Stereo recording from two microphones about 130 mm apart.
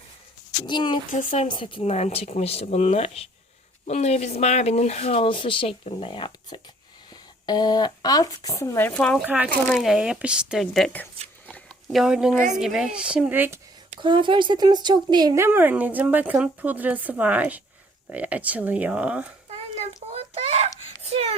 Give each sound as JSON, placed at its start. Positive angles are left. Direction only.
{"t": 0.6, "sound": "speech", "side_deg": 35}
{"t": 1.1, "sound": "speech", "side_deg": 80}
{"t": 1.5, "sound": "speech", "side_deg": 40}
{"t": 8.9, "sound": "speech", "side_deg": 10}
{"t": 9.2, "sound": "a woman's voice", "side_deg": -10}
{"t": 11.4, "sound": "a sound", "side_deg": 10}
{"t": 11.9, "sound": "a woman's voice", "side_deg": -5}
{"t": 14.0, "sound": "speech", "side_deg": -40}
{"t": 15.4, "sound": "a woman's voice", "side_deg": -15}
{"t": 19.5, "sound": "a sound", "side_deg": -50}